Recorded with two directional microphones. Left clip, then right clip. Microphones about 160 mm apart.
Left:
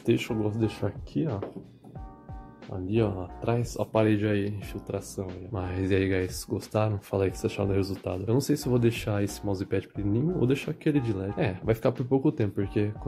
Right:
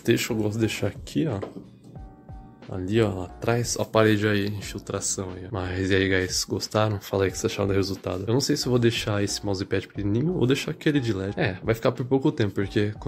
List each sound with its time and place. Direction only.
0.0 s speech: 10° right (ahead or behind)
2.9 s speech: 10° right (ahead or behind)